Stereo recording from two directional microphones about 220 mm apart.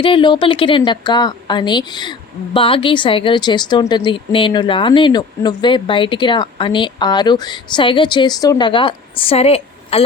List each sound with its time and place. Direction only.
0.0 s a woman's voice: 25° left (ahead or behind)